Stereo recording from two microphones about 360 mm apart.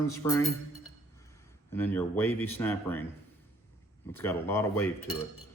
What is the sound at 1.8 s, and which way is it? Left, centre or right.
Speech, centre.